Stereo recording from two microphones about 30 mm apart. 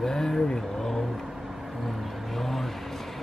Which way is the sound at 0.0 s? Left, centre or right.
Centre.